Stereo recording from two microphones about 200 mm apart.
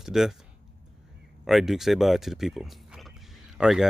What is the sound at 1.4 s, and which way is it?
Speech, centre (ahead or behind).